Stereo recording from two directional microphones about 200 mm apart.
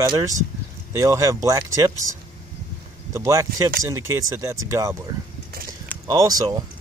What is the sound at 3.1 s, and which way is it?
Speech, 15° right (ahead or behind).